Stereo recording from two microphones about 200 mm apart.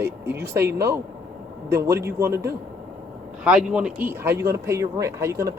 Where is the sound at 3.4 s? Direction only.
5° right (ahead or behind).